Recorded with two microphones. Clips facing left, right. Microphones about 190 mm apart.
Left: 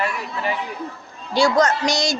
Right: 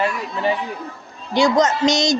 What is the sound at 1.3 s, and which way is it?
Speech, 20° right (ahead or behind).